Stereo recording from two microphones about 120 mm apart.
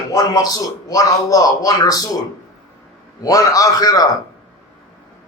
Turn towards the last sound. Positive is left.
turn(degrees=30)  # may be behind; listen again after turning